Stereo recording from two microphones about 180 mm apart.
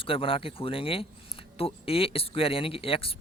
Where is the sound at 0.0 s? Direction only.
30° left (ahead or behind).